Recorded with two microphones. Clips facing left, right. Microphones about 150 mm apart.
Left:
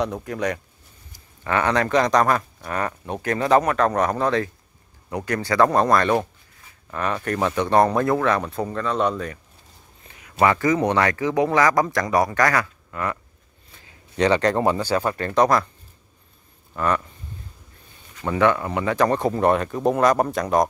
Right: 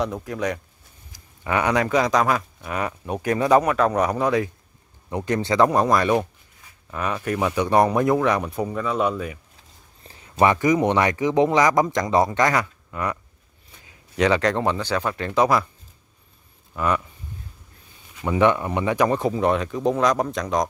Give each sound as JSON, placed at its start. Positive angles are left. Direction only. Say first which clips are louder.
{"t": 0.0, "sound": "speech", "louder": "left 1 dB", "side_deg": 0}
{"t": 1.4, "sound": "speech", "louder": "even", "side_deg": -15}
{"t": 5.1, "sound": "speech", "louder": "right 1 dB", "side_deg": -20}
{"t": 5.7, "sound": "speech", "louder": "left 1 dB", "side_deg": -10}
{"t": 10.0, "sound": "a sound", "louder": "right 3 dB", "side_deg": -30}
{"t": 10.4, "sound": "speech", "louder": "right 1 dB", "side_deg": -15}
{"t": 14.1, "sound": "speech", "louder": "left 1 dB", "side_deg": -5}
{"t": 16.7, "sound": "speech", "louder": "even", "side_deg": -10}
{"t": 18.2, "sound": "speech", "louder": "right 1 dB", "side_deg": -15}